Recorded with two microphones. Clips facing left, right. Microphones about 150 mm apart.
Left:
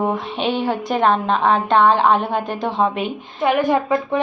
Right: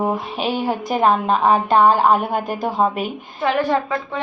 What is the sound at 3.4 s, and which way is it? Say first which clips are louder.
Speech: left 2 dB; 15° left (ahead or behind).